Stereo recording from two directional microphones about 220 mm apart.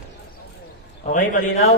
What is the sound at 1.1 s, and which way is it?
Speech, 35° left (ahead or behind).